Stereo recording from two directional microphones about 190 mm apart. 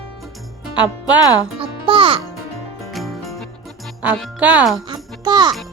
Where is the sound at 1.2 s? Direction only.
20° left (ahead or behind).